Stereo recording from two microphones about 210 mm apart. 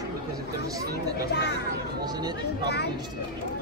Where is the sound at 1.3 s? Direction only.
55° left (ahead or behind).